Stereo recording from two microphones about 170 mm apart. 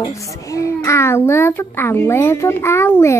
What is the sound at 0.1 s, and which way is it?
A child's voice, 20° left (ahead or behind).